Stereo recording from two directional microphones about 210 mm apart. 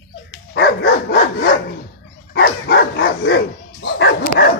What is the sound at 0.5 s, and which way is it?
Dog, 55° left (ahead or behind).